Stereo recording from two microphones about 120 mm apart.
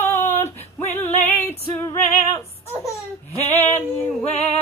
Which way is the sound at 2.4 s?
25° left (ahead or behind).